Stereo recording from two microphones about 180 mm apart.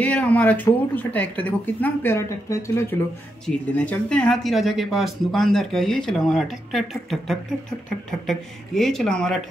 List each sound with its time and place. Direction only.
0.0 s a woman's voice: 10° left (ahead or behind)